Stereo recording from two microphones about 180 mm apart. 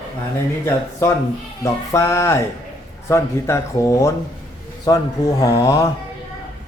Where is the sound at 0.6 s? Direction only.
15° left (ahead or behind).